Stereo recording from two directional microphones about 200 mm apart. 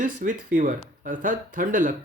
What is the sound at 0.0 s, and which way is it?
Speech, 40° right (ahead or behind).